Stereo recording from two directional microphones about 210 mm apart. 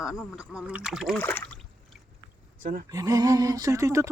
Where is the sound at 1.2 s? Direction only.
10° left (ahead or behind).